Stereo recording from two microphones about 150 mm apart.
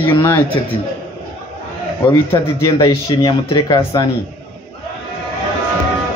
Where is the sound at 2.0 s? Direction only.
20° left (ahead or behind).